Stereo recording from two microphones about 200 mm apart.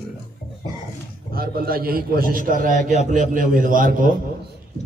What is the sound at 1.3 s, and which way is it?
A man's voice, 50° right (ahead or behind).